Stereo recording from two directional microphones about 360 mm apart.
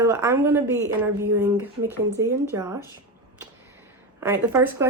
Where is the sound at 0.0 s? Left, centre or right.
Centre.